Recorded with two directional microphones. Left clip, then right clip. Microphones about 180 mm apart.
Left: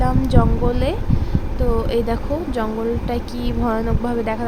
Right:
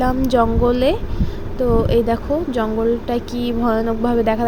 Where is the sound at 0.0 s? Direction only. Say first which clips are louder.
Right 4 dB; 20° right (ahead or behind).